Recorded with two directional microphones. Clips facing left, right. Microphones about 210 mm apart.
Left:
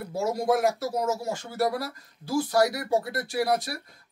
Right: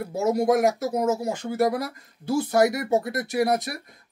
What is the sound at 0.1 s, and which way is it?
Speech, 20° right (ahead or behind).